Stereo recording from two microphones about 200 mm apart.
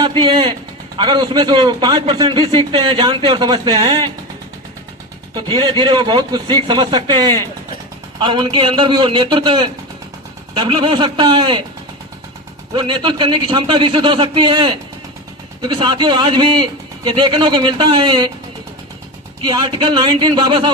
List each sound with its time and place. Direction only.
0.2 s a man's voice: 25° right (ahead or behind)
5.3 s a man's voice: 20° right (ahead or behind)
12.7 s a man's voice: 25° right (ahead or behind)
19.5 s a man's voice: 25° right (ahead or behind)